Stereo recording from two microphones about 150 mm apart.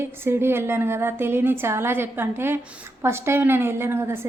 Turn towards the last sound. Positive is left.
turn(degrees=-15)  # may be behind; listen again after turning